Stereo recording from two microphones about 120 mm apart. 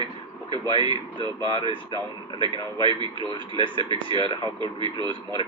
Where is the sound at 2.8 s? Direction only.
40° right (ahead or behind).